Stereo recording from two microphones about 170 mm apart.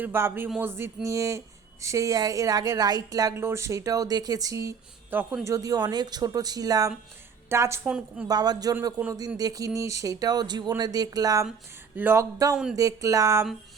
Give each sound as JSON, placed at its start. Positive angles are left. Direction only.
{"t": 0.0, "sound": "a woman's voice", "side_deg": -15}
{"t": 7.9, "sound": "a woman's voice", "side_deg": -5}
{"t": 8.3, "sound": "a woman's voice", "side_deg": -25}